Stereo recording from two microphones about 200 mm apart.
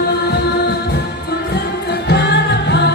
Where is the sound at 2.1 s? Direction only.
55° left (ahead or behind).